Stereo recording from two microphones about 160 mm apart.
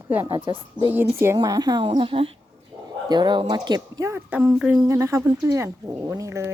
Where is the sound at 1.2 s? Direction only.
20° right (ahead or behind).